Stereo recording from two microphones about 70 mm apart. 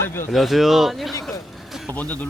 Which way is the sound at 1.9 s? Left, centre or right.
Left.